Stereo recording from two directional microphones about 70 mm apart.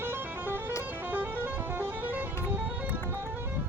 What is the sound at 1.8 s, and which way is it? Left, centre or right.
Vehicle, right.